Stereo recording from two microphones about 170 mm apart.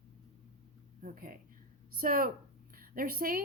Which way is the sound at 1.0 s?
55° right (ahead or behind).